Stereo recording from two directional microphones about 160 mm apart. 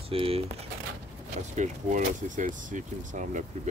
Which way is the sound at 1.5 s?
50° right (ahead or behind).